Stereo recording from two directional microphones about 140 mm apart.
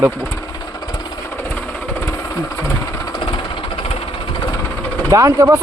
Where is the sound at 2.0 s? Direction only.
20° left (ahead or behind).